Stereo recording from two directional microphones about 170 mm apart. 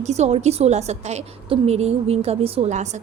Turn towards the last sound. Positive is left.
turn(degrees=-45)  # may be behind; listen again after turning